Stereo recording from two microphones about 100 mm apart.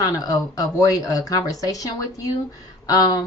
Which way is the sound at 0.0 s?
40° left (ahead or behind).